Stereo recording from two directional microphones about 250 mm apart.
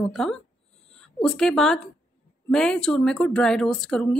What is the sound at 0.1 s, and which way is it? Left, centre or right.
A woman's voice, centre.